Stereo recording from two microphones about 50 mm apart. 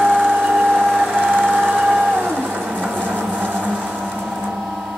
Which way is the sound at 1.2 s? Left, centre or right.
Right.